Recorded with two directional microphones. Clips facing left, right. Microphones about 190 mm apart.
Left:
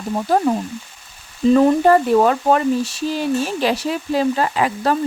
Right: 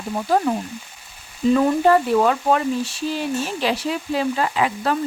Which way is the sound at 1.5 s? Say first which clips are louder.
Left 3 dB; 40° left (ahead or behind).